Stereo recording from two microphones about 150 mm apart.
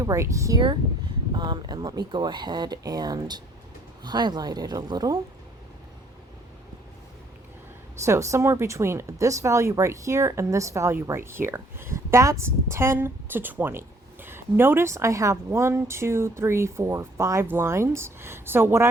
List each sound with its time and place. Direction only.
0.0 s speech: 20° right (ahead or behind)
8.0 s speech: 20° right (ahead or behind)